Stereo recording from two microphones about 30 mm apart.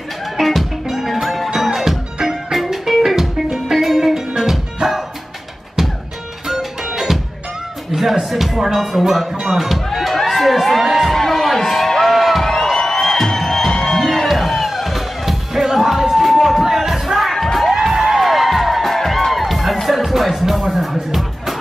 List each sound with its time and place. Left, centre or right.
0.4 s music: centre
5.8 s music: centre
8.3 s speech: centre
9.9 s crowd: centre
11.1 s a sound: centre
12.1 s music: centre
12.7 s music: centre
14.0 s music: centre
17.7 s music: centre